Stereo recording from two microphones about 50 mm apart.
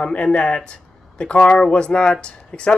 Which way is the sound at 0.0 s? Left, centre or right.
Left.